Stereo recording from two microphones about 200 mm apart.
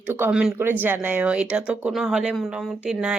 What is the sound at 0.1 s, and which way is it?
Speech, 10° right (ahead or behind).